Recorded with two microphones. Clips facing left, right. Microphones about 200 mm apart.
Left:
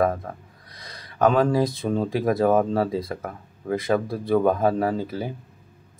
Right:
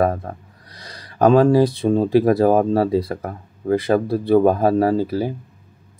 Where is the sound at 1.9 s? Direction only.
30° right (ahead or behind).